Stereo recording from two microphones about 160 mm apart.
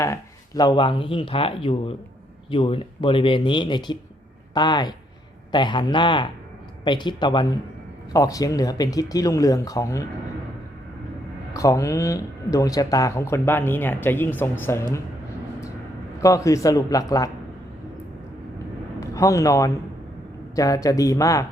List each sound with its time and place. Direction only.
0.0 s speech: 20° left (ahead or behind)
11.5 s speech: 20° left (ahead or behind)
16.2 s speech: 20° left (ahead or behind)
18.9 s speech: 20° left (ahead or behind)